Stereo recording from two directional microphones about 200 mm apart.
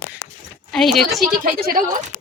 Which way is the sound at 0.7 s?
Centre (ahead or behind).